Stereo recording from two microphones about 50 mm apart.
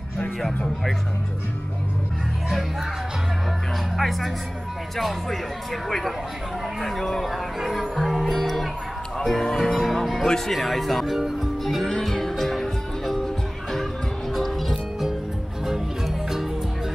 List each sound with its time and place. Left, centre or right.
3.9 s speech: centre
11.6 s music: centre